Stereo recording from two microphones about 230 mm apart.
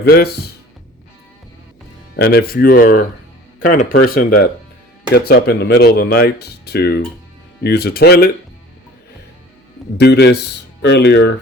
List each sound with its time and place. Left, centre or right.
0.0 s speech: left
2.1 s speech: left
10.0 s speech: left